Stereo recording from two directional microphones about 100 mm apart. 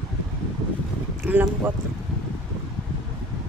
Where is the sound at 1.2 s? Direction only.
15° right (ahead or behind).